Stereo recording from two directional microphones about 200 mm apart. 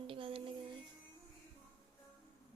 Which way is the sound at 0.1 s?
25° right (ahead or behind).